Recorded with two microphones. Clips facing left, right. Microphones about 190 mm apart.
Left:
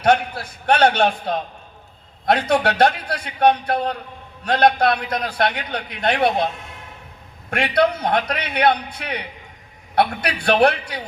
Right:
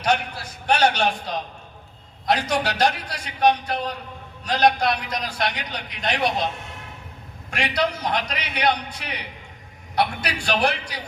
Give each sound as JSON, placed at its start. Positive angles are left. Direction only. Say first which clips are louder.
{"t": 0.7, "sound": "a man's voice", "louder": "left 4 dB", "side_deg": 60}
{"t": 7.5, "sound": "a man's voice", "louder": "left 6 dB", "side_deg": 60}